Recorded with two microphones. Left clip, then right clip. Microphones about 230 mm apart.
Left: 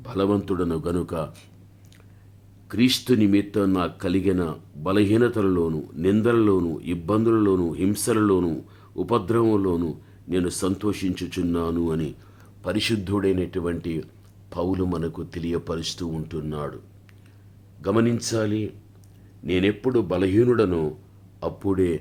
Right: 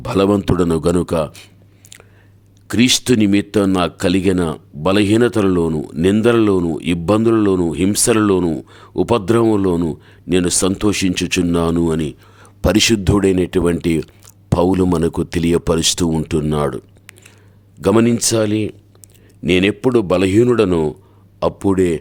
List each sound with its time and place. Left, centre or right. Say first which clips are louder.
0.0 s speech: right 9 dB; right
2.6 s speech: right 7 dB; right
12.6 s speech: right 11 dB; right